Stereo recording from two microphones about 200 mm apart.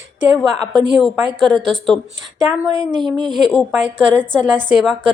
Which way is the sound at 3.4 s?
Centre (ahead or behind).